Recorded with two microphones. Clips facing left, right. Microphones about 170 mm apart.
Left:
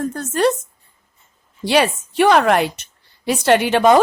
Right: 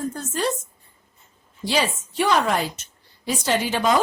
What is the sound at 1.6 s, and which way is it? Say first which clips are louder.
A woman's voice: left 7 dB; 65° left (ahead or behind).